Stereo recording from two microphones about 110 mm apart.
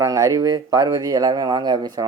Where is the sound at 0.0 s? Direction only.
30° right (ahead or behind).